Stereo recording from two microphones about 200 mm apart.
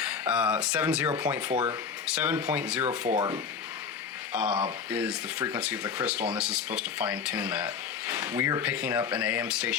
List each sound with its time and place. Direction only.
0.0 s speech: 5° right (ahead or behind)
3.2 s speech: 20° right (ahead or behind)
4.3 s speech: 5° right (ahead or behind)